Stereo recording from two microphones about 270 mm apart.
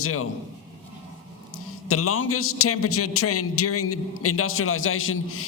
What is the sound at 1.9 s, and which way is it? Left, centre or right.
A man's voice, left.